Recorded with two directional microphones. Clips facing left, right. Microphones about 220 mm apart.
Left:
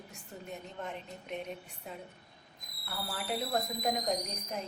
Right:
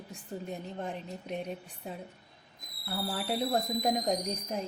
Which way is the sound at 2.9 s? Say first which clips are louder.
Right 4 dB; 30° right (ahead or behind).